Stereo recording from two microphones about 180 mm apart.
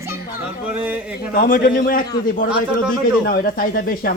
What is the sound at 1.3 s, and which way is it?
Speech, 50° left (ahead or behind).